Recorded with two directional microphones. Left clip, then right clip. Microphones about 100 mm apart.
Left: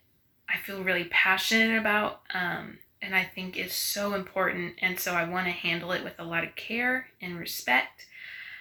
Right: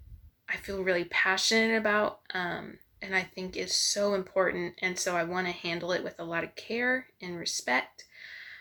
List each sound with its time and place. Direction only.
0.7 s speech: 30° right (ahead or behind)